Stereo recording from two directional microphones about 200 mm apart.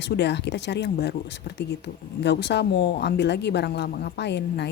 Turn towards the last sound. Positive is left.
turn(degrees=60)  # may be behind; listen again after turning